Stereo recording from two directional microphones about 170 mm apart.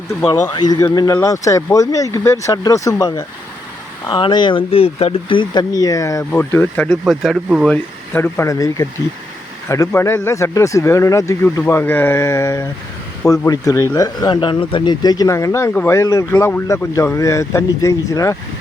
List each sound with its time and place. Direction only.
0.5 s speech: 25° left (ahead or behind); by 7.8 s centre (ahead or behind)
8.1 s speech: 15° left (ahead or behind)